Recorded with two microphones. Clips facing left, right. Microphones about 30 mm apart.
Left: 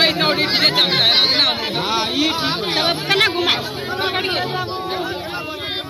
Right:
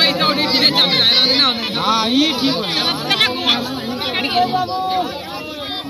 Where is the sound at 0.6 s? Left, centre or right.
Centre.